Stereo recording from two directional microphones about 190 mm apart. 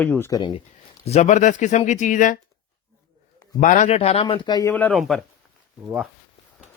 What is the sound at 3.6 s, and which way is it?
Speech, 40° left (ahead or behind).